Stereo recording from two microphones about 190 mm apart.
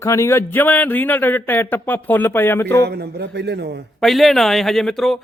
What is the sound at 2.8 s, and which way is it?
A man's voice, 60° right (ahead or behind).